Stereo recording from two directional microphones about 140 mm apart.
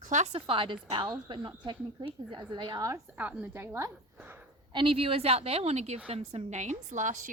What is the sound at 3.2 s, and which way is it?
A woman's voice, 10° right (ahead or behind).